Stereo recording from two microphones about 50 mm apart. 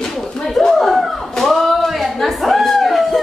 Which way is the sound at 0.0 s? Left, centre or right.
Centre.